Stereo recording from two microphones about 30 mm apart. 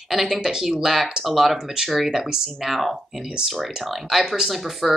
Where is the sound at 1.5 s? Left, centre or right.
Centre.